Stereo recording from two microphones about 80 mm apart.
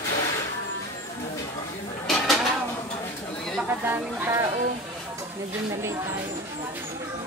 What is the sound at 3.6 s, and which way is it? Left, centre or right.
Speech, right.